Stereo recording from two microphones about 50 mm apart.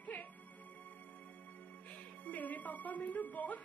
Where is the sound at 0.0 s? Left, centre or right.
Left.